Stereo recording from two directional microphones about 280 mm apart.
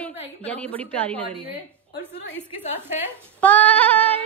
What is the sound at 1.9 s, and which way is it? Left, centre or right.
Speech, left.